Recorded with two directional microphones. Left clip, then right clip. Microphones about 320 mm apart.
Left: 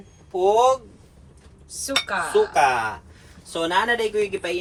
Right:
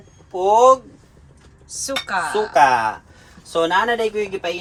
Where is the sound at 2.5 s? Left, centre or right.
Right.